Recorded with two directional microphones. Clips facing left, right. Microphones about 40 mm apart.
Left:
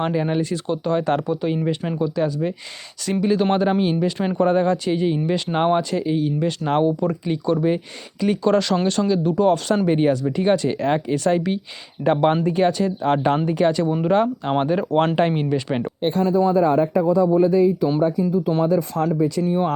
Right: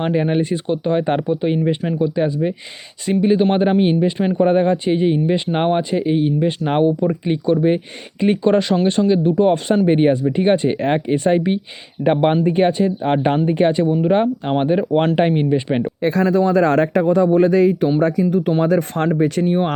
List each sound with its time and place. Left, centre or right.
0.1 s speech: right
1.8 s speech: centre
2.0 s speech: right
13.6 s speech: right
16.2 s a man's voice: right